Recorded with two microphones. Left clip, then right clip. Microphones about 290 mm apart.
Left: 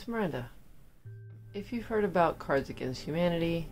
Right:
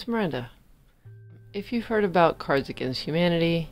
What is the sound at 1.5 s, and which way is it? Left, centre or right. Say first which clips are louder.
Speech: right 6 dB; right.